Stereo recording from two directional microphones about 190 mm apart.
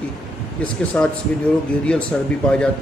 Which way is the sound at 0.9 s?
10° left (ahead or behind).